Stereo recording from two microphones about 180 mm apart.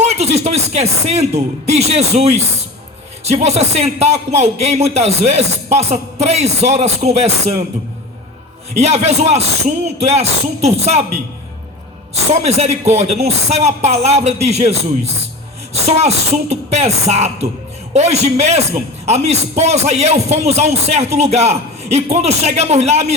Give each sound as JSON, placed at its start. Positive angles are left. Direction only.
{"t": 0.0, "sound": "a man's voice", "side_deg": -35}
{"t": 8.8, "sound": "a man's voice", "side_deg": -40}
{"t": 12.1, "sound": "a man's voice", "side_deg": -35}